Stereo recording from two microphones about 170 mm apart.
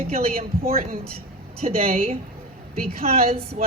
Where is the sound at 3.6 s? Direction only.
45° right (ahead or behind).